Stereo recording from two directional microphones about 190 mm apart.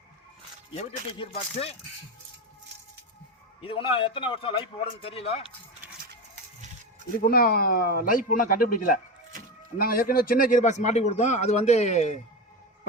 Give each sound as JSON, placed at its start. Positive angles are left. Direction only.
{"t": 0.8, "sound": "a man's voice", "side_deg": 35}
{"t": 3.6, "sound": "a man's voice", "side_deg": 30}
{"t": 7.2, "sound": "a man's voice", "side_deg": 50}